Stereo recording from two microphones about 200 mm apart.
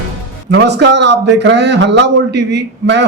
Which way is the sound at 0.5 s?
60° right (ahead or behind).